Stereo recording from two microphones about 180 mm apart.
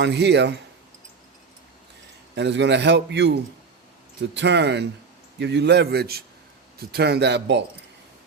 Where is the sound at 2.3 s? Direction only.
75° right (ahead or behind).